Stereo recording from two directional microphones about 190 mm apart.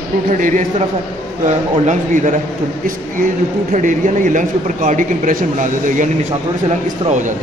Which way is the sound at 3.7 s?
40° right (ahead or behind).